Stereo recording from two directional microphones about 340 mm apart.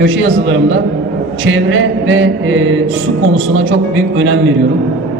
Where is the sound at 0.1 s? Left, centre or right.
Right.